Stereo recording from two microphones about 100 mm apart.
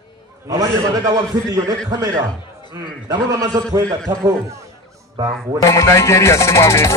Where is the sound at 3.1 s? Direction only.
35° right (ahead or behind).